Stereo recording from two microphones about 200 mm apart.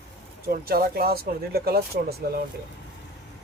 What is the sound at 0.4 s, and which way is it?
Speech, 50° right (ahead or behind).